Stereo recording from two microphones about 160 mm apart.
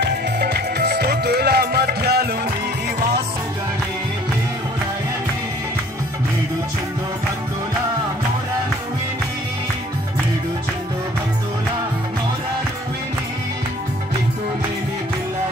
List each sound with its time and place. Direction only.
0.0 s music: 85° right